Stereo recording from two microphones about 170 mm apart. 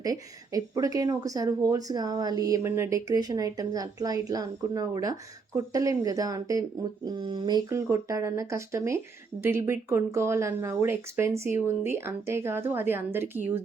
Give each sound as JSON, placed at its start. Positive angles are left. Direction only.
{"t": 0.0, "sound": "speech", "side_deg": -20}